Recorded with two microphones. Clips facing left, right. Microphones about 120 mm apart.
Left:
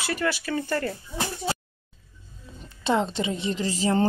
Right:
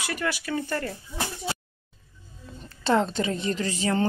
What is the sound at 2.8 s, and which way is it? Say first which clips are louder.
A woman's voice: right 1 dB; 15° left (ahead or behind).